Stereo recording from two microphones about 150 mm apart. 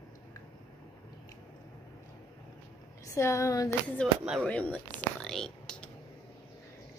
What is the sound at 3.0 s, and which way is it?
Speech, 20° left (ahead or behind).